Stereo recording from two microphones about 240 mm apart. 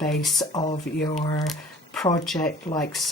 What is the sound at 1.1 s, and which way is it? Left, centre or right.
Speech, left.